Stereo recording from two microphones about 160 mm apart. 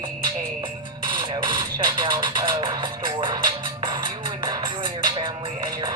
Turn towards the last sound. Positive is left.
turn(degrees=-25)  # may be behind; listen again after turning